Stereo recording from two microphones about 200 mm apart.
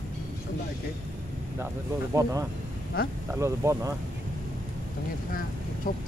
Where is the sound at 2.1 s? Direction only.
15° right (ahead or behind).